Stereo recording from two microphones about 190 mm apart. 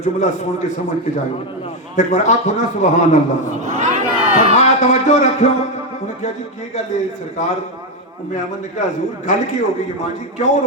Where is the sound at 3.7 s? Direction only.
40° right (ahead or behind).